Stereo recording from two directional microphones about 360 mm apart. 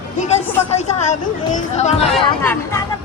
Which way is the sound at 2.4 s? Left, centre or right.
Centre.